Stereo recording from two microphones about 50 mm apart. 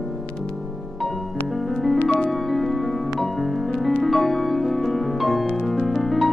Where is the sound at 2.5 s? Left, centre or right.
Centre.